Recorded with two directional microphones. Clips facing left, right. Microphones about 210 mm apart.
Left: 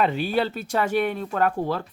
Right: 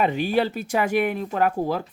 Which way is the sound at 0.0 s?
15° right (ahead or behind).